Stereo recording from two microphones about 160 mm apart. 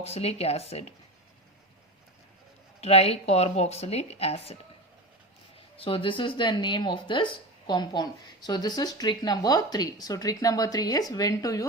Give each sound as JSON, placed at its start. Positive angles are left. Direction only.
{"t": 0.0, "sound": "speech", "side_deg": 40}
{"t": 2.8, "sound": "speech", "side_deg": 40}
{"t": 5.7, "sound": "a woman's voice", "side_deg": 35}